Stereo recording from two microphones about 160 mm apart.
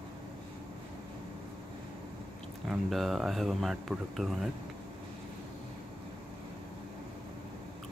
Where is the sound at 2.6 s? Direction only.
Centre (ahead or behind).